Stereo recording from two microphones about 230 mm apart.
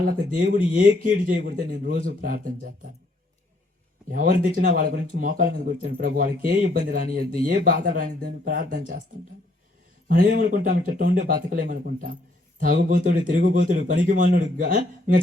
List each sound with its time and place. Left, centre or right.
0.0 s speech: right
4.1 s speech: right
10.1 s speech: right